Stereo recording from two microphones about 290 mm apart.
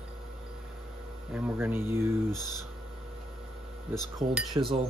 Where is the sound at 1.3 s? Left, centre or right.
Centre.